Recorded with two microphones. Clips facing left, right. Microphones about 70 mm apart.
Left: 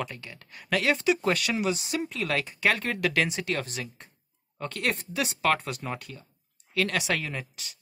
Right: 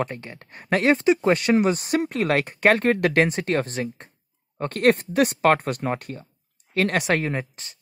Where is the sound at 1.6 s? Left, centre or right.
Right.